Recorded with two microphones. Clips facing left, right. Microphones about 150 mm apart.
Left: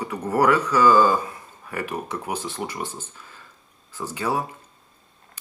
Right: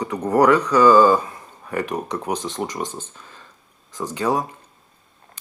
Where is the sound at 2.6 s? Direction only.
30° right (ahead or behind).